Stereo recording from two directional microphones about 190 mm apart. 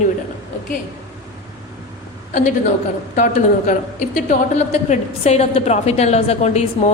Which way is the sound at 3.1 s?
45° left (ahead or behind).